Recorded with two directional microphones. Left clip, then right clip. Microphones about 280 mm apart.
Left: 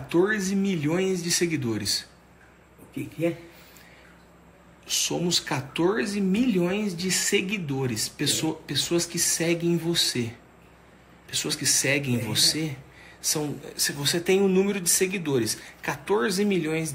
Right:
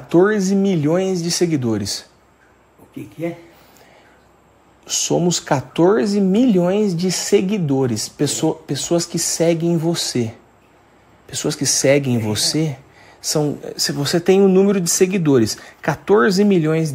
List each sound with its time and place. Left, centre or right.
0.1 s speech: right
4.8 s speech: right